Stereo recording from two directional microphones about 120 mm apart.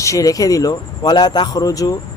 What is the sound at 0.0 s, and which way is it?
Speech, 25° left (ahead or behind).